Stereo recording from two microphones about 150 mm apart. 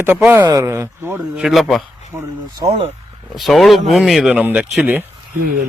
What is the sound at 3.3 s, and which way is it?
A man's voice, centre (ahead or behind).